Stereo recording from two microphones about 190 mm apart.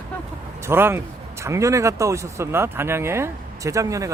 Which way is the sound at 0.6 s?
10° right (ahead or behind).